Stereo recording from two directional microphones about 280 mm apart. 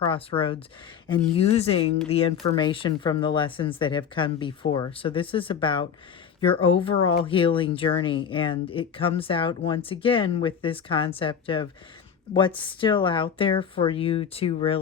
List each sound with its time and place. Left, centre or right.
0.0 s speech: centre